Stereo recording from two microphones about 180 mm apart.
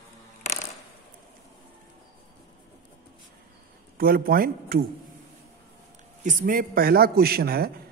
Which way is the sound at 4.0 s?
55° right (ahead or behind).